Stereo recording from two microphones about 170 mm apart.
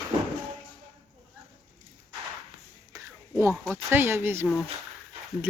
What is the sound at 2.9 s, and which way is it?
Whispering, 15° right (ahead or behind).